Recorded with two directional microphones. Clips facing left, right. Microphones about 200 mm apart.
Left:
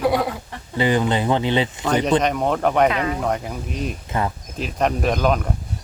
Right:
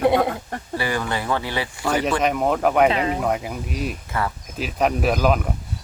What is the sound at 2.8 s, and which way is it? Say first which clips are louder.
Speech: right 1 dB; 30° right (ahead or behind).